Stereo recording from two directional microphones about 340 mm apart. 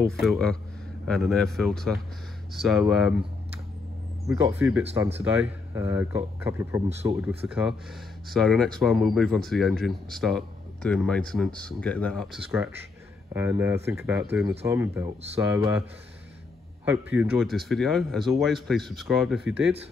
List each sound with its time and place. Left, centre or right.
0.0 s speech: centre
4.3 s speech: centre
6.9 s speech: centre
7.2 s speech: centre
16.8 s speech: centre